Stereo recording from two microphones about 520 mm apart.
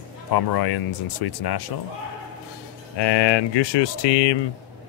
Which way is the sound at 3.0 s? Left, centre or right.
Left.